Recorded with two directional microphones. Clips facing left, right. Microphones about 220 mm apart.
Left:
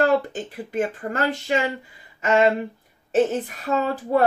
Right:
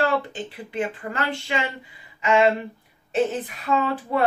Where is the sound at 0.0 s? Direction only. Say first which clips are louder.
Left 4 dB; 45° left (ahead or behind).